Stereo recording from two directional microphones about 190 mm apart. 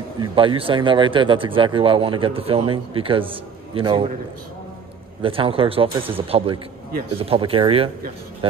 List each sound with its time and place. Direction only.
0.2 s speech: 25° right (ahead or behind)
5.2 s speech: 30° right (ahead or behind)